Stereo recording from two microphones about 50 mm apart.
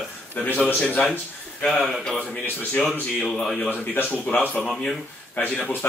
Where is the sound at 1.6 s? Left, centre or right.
Centre.